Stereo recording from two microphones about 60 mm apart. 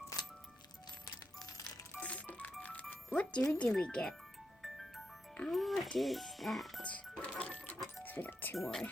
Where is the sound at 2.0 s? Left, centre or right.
Left.